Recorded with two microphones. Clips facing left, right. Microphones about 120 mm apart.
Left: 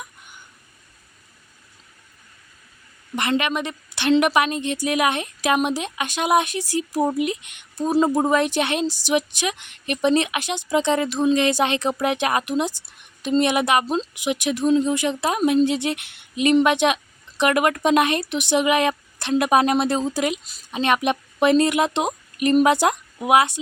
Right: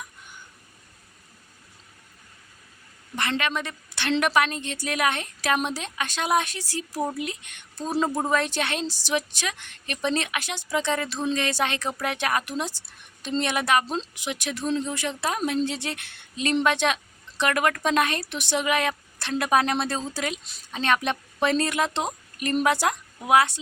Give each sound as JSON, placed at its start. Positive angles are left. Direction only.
{"t": 3.2, "sound": "a woman's voice", "side_deg": 15}